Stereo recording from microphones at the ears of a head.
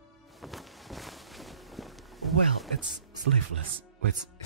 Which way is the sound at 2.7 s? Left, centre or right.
Right.